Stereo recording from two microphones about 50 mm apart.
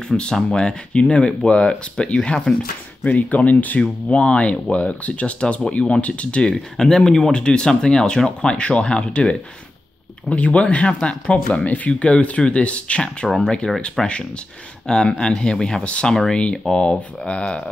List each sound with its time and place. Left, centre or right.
0.1 s speech: centre
3.0 s speech: left
6.8 s speech: centre